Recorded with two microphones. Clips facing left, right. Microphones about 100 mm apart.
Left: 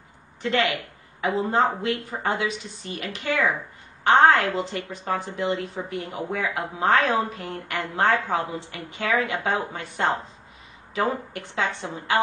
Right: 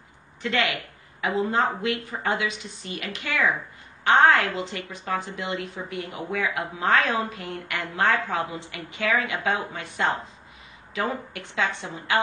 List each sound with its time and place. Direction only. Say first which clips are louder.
0.4 s a woman's voice: left 2 dB; 35° left (ahead or behind)